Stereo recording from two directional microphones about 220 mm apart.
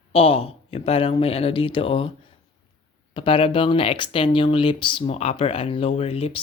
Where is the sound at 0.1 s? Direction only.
25° left (ahead or behind).